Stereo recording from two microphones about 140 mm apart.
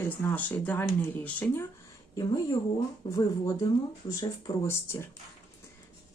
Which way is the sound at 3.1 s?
25° left (ahead or behind).